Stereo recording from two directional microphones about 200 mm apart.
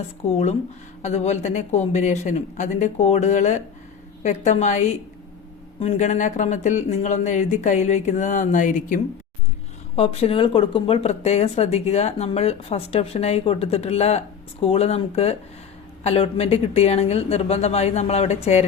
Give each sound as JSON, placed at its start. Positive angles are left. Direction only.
{"t": 0.3, "sound": "speech", "side_deg": 30}